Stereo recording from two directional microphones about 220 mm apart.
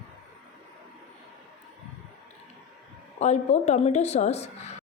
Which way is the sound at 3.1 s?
30° left (ahead or behind).